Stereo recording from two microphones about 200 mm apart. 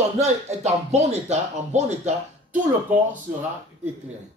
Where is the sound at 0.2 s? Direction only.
35° right (ahead or behind).